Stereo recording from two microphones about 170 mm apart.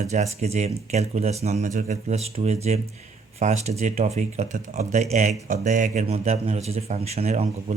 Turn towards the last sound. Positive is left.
turn(degrees=-40)  # may be behind; listen again after turning